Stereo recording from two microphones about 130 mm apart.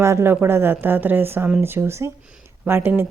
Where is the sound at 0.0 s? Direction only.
20° right (ahead or behind).